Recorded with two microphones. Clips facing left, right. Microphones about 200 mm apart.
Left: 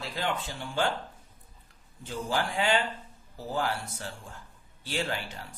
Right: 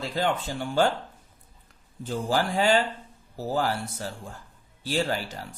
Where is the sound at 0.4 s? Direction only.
40° right (ahead or behind).